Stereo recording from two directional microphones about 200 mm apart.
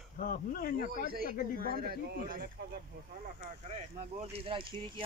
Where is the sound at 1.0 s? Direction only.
50° right (ahead or behind).